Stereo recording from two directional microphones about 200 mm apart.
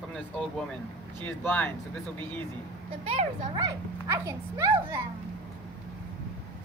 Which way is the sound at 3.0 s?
30° right (ahead or behind).